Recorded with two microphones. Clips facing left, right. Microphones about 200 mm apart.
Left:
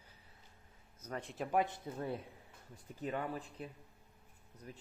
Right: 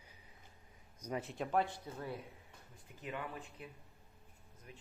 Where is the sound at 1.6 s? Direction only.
20° left (ahead or behind).